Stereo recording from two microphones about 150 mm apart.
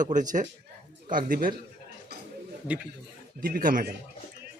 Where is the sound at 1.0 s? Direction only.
70° right (ahead or behind).